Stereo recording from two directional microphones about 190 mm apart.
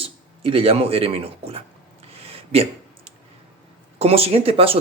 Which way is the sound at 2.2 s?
30° right (ahead or behind).